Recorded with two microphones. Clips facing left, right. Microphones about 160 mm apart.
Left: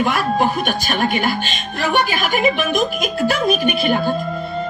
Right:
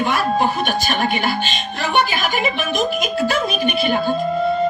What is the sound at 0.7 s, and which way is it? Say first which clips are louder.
A woman's voice: even; 50° left (ahead or behind).